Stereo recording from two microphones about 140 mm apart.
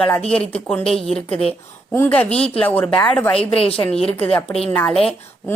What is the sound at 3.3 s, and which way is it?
Speech, 45° left (ahead or behind).